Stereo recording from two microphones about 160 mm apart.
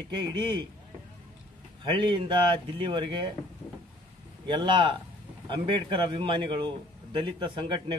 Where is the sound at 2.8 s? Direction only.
30° right (ahead or behind).